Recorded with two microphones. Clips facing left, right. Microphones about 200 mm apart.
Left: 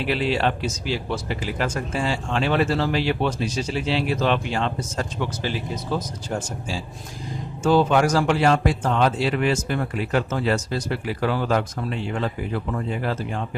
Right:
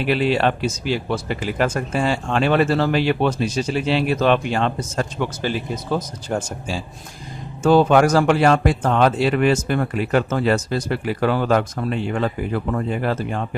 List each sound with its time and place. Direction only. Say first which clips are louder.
0.0 s speech: right 4 dB; 55° right (ahead or behind)